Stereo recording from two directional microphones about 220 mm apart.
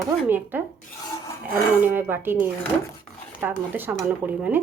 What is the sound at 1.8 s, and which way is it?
A woman's voice, 10° right (ahead or behind).